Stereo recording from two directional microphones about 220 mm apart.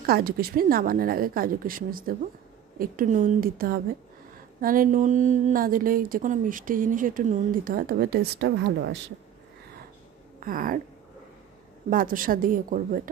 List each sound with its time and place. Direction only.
0.0 s a woman's voice: 40° right (ahead or behind)
10.4 s a woman's voice: 40° right (ahead or behind)
11.9 s a woman's voice: 40° right (ahead or behind)